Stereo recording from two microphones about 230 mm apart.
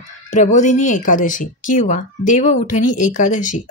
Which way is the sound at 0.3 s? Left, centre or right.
Left.